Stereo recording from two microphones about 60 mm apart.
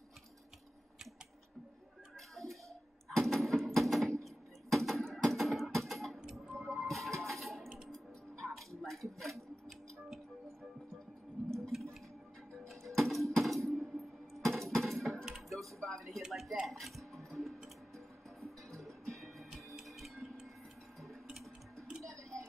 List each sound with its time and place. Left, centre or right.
2.1 s music: centre
3.1 s sewing machine: centre
6.3 s a sound: centre
7.9 s music: centre
11.6 s a sound: centre
12.6 s music: centre
14.4 s a sound: centre
16.6 s music: centre
22.0 s tick: right